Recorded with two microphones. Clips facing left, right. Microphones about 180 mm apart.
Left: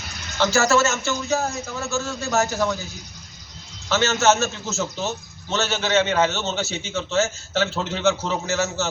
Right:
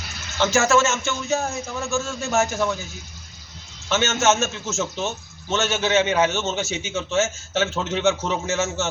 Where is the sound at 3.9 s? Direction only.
35° left (ahead or behind).